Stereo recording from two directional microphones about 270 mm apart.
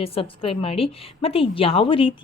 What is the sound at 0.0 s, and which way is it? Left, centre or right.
A woman's voice, left.